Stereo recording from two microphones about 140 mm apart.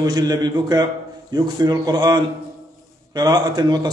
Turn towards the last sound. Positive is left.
turn(degrees=-30)  # may be behind; listen again after turning